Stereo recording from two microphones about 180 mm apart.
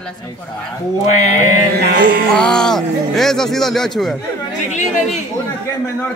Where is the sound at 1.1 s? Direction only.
40° left (ahead or behind).